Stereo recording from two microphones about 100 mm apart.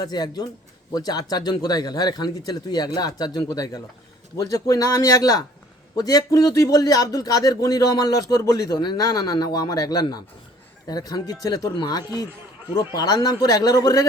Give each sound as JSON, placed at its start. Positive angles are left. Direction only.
{"t": 0.0, "sound": "a man's voice", "side_deg": 45}